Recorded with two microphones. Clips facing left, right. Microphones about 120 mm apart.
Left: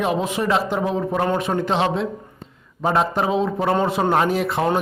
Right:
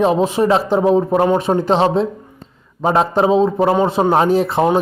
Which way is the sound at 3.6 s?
15° right (ahead or behind).